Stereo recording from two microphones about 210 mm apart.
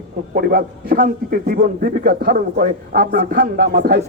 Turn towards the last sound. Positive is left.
turn(degrees=-45)  # may be behind; listen again after turning